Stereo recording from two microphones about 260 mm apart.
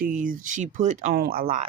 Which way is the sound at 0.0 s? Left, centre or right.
Right.